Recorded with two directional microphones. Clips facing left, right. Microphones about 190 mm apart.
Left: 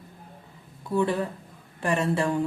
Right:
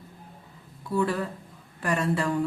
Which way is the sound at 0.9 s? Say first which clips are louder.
Left 2 dB; 20° left (ahead or behind).